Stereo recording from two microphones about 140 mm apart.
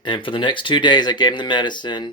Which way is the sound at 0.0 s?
35° left (ahead or behind).